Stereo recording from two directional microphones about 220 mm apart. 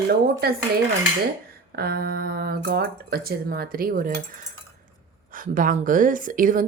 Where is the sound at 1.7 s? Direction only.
45° right (ahead or behind).